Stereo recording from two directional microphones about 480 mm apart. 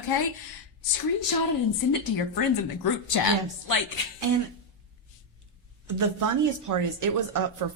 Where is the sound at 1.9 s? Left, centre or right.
Left.